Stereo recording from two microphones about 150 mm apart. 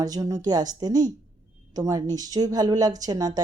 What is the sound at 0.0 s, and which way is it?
Speech, 25° right (ahead or behind).